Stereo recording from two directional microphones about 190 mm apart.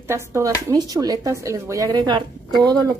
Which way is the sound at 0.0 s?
15° right (ahead or behind).